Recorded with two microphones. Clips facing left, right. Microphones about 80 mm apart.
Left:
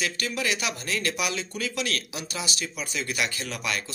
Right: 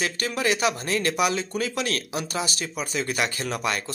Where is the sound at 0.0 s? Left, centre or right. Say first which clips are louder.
Right 3 dB; right.